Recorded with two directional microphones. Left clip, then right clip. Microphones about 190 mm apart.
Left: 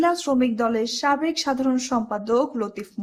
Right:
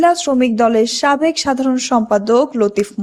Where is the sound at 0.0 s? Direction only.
35° right (ahead or behind).